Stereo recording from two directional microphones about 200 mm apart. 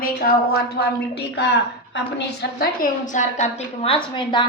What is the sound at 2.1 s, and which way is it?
A woman's voice, 50° left (ahead or behind).